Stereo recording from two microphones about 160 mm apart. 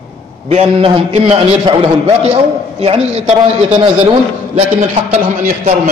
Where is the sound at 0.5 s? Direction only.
45° right (ahead or behind).